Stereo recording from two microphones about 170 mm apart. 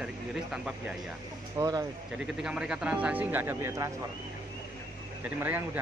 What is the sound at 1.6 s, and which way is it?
Speech, 20° right (ahead or behind).